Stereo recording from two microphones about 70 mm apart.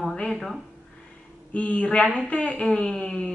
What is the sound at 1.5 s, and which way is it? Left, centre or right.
Speech, centre.